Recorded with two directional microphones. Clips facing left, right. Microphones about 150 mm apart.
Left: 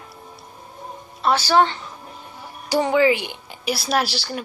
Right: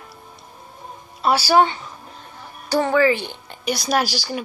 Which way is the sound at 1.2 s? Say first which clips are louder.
Right 1 dB; 10° right (ahead or behind).